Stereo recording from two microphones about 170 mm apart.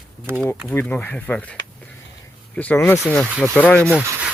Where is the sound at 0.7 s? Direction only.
10° left (ahead or behind).